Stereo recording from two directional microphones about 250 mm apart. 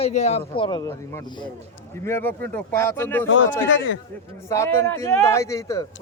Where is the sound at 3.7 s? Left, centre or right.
Left.